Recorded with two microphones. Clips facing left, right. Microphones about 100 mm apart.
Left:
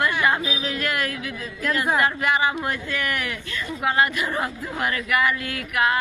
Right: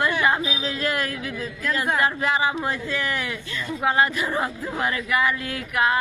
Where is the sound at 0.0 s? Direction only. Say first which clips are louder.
Even; 30° right (ahead or behind).